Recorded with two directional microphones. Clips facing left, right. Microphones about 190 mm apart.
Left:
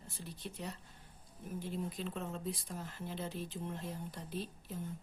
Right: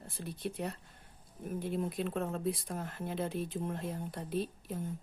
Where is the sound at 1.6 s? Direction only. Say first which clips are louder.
Right 5 dB; 60° right (ahead or behind).